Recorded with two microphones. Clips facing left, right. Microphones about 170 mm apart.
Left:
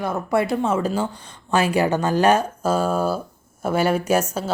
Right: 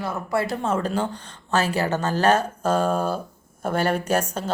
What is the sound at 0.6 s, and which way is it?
Speech, 10° left (ahead or behind).